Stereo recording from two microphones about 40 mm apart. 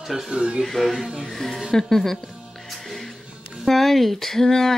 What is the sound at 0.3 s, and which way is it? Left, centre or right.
Speech, right.